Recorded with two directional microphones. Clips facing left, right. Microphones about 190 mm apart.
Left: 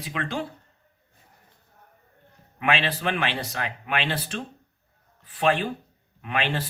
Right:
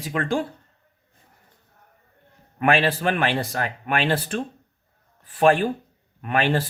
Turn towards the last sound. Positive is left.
turn(degrees=-45)  # may be behind; listen again after turning